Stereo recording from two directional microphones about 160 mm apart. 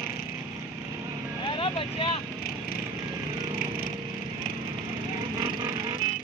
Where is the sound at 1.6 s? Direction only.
30° left (ahead or behind).